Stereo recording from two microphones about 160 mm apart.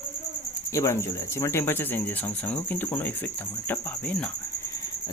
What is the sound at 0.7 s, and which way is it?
Speech, 15° left (ahead or behind).